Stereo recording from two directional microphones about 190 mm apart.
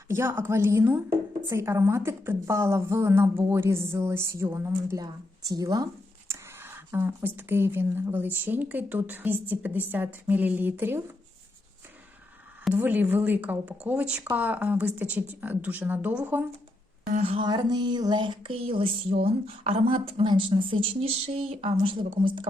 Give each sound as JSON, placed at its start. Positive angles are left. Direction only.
{"t": 0.1, "sound": "a woman's voice", "side_deg": -15}
{"t": 12.6, "sound": "a woman's voice", "side_deg": -10}
{"t": 17.1, "sound": "a woman's voice", "side_deg": -35}